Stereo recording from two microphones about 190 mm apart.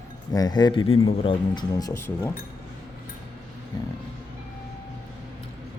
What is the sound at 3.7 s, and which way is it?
Speech, 20° left (ahead or behind).